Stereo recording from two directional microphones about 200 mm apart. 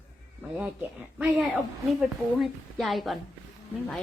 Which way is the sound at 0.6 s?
5° right (ahead or behind).